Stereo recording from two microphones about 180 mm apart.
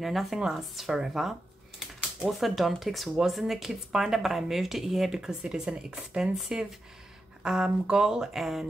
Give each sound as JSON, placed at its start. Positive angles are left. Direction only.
{"t": 0.0, "sound": "speech", "side_deg": 0}